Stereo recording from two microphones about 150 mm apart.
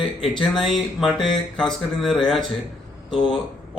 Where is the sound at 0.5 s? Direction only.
Centre (ahead or behind).